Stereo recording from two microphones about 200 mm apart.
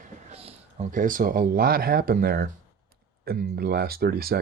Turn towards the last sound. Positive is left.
turn(degrees=-50)  # may be behind; listen again after turning